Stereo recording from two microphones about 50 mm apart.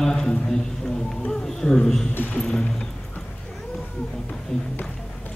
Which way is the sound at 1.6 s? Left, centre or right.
Centre.